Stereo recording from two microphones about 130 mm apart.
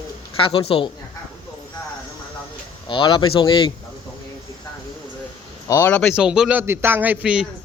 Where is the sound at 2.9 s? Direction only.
40° left (ahead or behind).